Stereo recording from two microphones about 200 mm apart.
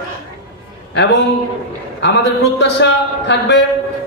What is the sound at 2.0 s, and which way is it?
A man's voice, 60° left (ahead or behind).